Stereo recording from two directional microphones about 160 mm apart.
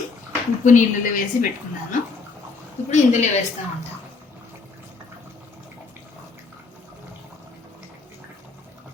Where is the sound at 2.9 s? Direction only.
50° left (ahead or behind).